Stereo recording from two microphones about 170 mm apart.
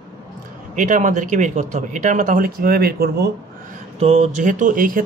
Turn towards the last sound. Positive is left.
turn(degrees=-50)  # may be behind; listen again after turning